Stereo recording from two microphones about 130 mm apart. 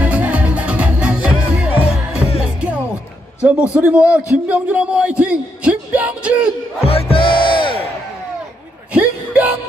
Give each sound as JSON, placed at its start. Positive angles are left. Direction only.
{"t": 0.0, "sound": "music", "side_deg": -10}
{"t": 3.4, "sound": "speech", "side_deg": -10}
{"t": 6.8, "sound": "speech", "side_deg": 50}
{"t": 8.9, "sound": "a sound", "side_deg": -10}